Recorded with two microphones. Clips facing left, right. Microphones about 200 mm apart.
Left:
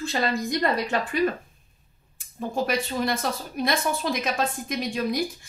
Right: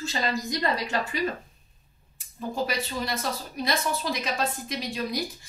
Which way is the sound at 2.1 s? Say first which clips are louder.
Left 2 dB; 50° left (ahead or behind).